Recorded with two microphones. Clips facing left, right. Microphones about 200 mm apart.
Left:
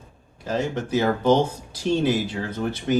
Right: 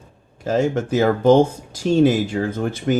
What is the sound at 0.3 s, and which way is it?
Speech, 45° right (ahead or behind).